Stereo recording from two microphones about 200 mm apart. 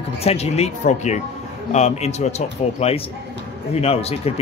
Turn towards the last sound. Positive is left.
turn(degrees=30)  # may be behind; listen again after turning